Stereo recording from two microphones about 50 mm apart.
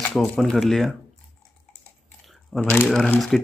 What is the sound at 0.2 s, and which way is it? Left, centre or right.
Speech, centre.